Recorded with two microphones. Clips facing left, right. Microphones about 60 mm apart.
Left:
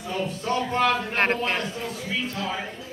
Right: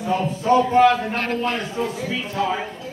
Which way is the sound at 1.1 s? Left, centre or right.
Left.